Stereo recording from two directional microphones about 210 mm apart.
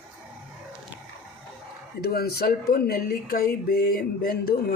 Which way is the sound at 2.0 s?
45° left (ahead or behind).